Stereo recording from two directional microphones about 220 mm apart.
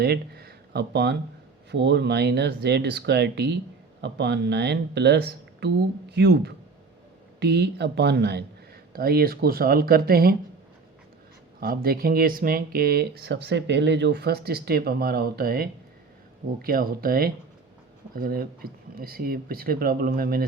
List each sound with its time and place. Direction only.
0.0 s speech: 45° right (ahead or behind)
11.6 s speech: 40° right (ahead or behind)